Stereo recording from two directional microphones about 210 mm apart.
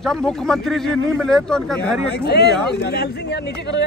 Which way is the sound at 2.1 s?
50° left (ahead or behind).